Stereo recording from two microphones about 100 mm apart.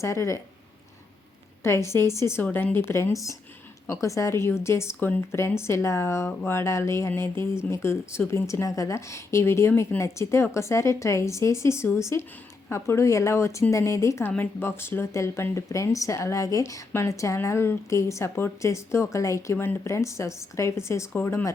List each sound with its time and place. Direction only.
0.0 s speech: 30° left (ahead or behind)
1.6 s speech: 25° left (ahead or behind)